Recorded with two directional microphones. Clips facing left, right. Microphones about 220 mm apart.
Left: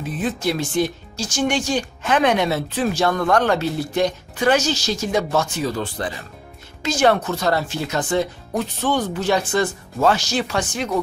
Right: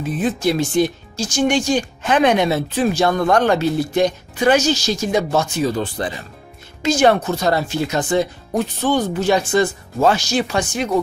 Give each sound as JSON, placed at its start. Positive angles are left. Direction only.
{"t": 0.2, "sound": "speech", "side_deg": -15}
{"t": 5.3, "sound": "speech", "side_deg": -25}